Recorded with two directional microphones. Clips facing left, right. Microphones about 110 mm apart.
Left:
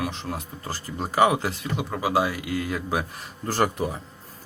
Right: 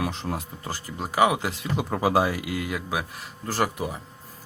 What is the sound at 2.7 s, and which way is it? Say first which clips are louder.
A man's voice: left 2 dB; 5° right (ahead or behind).